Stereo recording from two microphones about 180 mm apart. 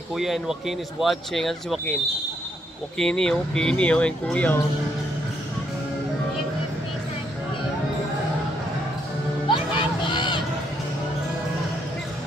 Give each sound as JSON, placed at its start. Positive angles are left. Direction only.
{"t": 0.1, "sound": "speech", "side_deg": 0}
{"t": 3.0, "sound": "speech", "side_deg": 0}
{"t": 9.5, "sound": "a sound", "side_deg": 25}